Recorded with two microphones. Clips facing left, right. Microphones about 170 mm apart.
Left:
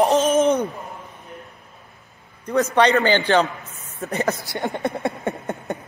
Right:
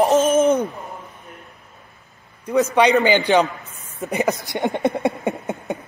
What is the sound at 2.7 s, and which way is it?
Speech, 10° right (ahead or behind).